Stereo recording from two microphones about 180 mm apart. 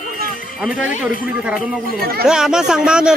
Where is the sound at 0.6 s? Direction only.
5° right (ahead or behind).